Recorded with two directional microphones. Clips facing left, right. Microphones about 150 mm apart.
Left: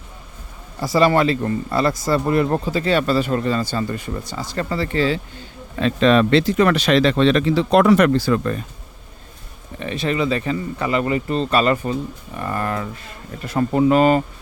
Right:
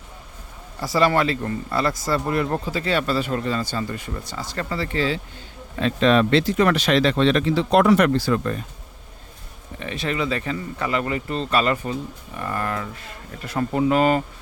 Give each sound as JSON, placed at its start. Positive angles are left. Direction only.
{"t": 0.8, "sound": "speech", "side_deg": 15}
{"t": 4.3, "sound": "speech", "side_deg": 15}
{"t": 4.7, "sound": "speech", "side_deg": 35}
{"t": 5.7, "sound": "speech", "side_deg": 80}
{"t": 9.8, "sound": "speech", "side_deg": 25}
{"t": 11.6, "sound": "speech", "side_deg": 35}